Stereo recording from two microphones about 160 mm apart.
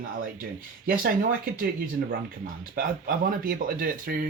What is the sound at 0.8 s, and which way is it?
Speech, 65° right (ahead or behind).